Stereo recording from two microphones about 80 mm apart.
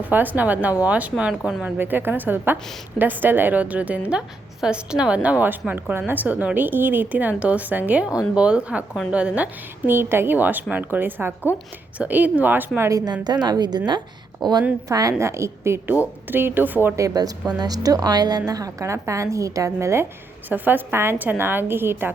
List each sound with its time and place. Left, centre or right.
0.0 s a woman's voice: right
1.1 s speech: centre
1.6 s a woman's voice: right
13.2 s a woman's voice: right
14.8 s a woman's voice: right
15.2 s a woman's voice: right
15.9 s a woman's voice: right
16.9 s a woman's voice: right
20.5 s a woman's voice: right